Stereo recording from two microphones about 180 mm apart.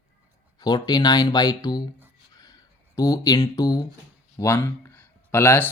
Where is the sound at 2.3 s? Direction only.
20° left (ahead or behind).